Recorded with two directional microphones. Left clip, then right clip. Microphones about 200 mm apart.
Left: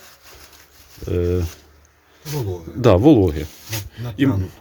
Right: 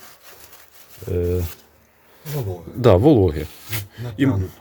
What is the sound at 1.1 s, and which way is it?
Speech, 20° left (ahead or behind).